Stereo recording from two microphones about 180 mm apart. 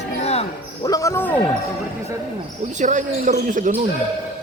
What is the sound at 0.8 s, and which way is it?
Speech, 20° left (ahead or behind).